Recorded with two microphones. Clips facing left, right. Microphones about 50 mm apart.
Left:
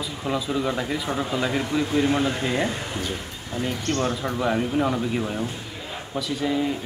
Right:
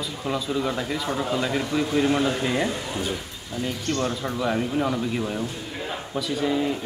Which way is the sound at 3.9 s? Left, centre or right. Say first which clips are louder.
Left 1 dB; left.